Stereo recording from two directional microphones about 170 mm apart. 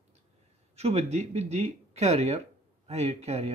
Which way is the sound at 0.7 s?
40° right (ahead or behind).